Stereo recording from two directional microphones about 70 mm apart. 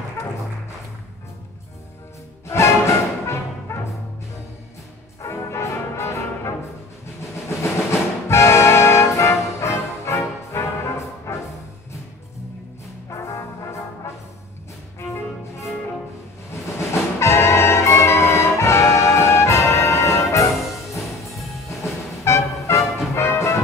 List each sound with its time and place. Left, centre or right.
2.4 s music: left
5.2 s brass instrument: left
7.4 s music: left
13.1 s brass instrument: left
16.9 s music: left